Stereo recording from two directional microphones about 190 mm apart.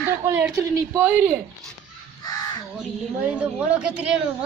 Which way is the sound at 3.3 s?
5° right (ahead or behind).